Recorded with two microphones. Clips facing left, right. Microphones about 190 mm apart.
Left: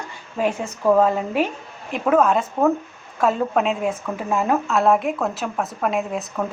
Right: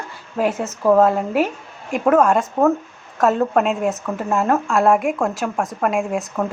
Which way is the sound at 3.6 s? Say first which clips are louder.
Right 2 dB; 45° right (ahead or behind).